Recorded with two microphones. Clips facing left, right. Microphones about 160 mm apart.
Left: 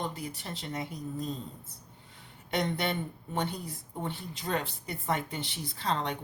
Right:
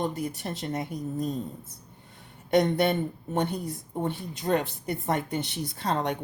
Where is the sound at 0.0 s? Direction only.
50° right (ahead or behind).